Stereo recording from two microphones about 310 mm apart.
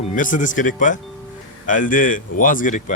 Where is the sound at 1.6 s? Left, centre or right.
Left.